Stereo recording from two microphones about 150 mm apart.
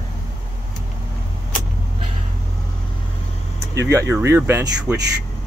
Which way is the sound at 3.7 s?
20° right (ahead or behind).